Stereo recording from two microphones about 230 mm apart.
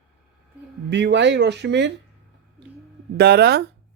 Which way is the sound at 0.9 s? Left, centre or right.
Right.